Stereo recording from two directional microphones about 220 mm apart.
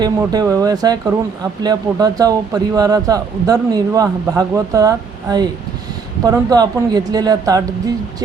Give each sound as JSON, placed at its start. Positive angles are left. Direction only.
{"t": 0.0, "sound": "speech", "side_deg": -15}